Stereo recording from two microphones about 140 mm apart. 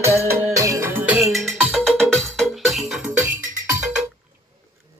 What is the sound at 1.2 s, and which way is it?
Music, centre (ahead or behind).